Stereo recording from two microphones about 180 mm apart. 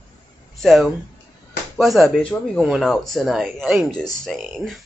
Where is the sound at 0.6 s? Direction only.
Centre (ahead or behind).